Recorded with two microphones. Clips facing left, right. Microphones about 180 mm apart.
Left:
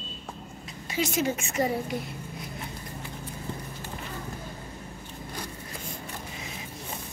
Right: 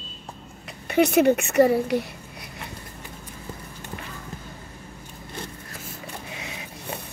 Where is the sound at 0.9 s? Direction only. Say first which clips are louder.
Right 10 dB; 60° right (ahead or behind).